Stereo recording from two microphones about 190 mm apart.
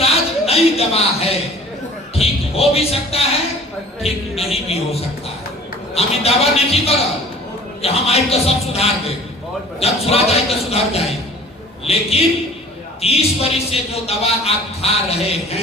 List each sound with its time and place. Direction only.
0.0 s a sound: 30° left (ahead or behind)
2.1 s music: 30° left (ahead or behind)
4.0 s a man's voice: 30° left (ahead or behind)